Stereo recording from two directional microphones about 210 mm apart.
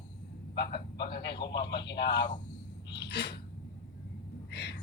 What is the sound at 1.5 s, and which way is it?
Speech, 55° left (ahead or behind).